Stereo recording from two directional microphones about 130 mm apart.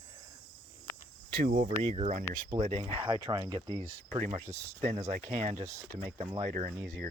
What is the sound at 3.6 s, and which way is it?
Speech, 35° right (ahead or behind).